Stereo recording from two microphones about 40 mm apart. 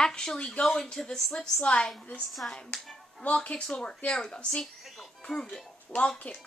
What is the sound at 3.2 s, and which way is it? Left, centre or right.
Speech, left.